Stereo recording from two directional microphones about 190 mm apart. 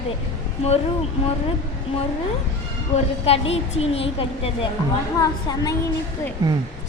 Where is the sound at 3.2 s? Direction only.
30° left (ahead or behind).